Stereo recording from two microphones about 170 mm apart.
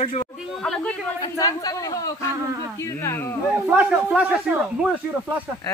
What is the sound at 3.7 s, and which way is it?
Speech, 10° right (ahead or behind).